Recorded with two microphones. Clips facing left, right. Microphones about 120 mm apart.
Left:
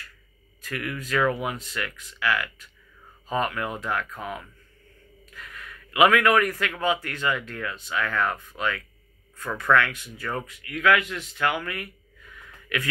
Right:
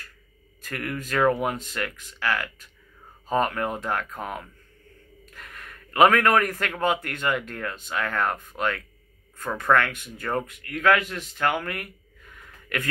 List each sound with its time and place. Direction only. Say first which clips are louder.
0.7 s speech: even; 45° right (ahead or behind)